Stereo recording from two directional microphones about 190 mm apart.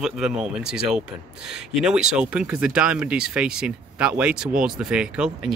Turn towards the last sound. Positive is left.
turn(degrees=-5)  # may be behind; listen again after turning